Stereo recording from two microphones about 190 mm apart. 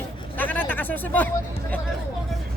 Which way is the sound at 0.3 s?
10° left (ahead or behind).